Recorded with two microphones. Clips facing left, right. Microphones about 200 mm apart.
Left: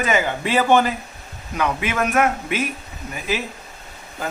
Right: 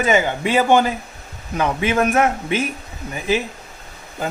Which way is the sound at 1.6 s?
30° right (ahead or behind).